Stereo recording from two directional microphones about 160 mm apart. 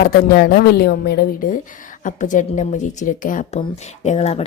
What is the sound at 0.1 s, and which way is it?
Speech, 80° left.